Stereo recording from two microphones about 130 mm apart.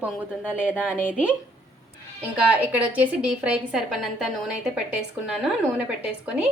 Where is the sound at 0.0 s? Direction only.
10° right (ahead or behind).